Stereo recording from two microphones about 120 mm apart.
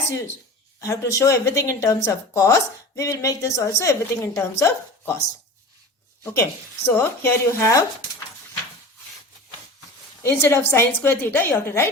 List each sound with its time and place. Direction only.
0.8 s speech: 25° left (ahead or behind)
6.2 s speech: 25° left (ahead or behind)
10.2 s speech: 20° left (ahead or behind)